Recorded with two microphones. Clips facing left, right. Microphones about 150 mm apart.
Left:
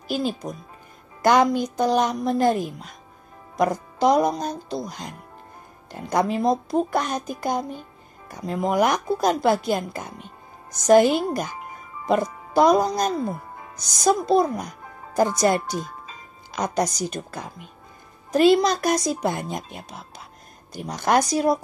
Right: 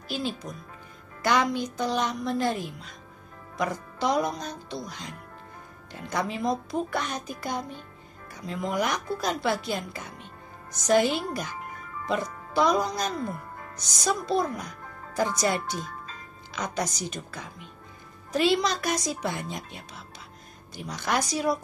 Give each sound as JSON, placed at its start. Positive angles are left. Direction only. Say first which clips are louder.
{"t": 0.1, "sound": "a child's voice", "louder": "left 6 dB", "side_deg": 45}
{"t": 12.5, "sound": "a child's voice", "louder": "left 6 dB", "side_deg": 45}
{"t": 15.6, "sound": "music", "louder": "left 4 dB", "side_deg": 10}
{"t": 16.5, "sound": "a child's voice", "louder": "left 7 dB", "side_deg": 45}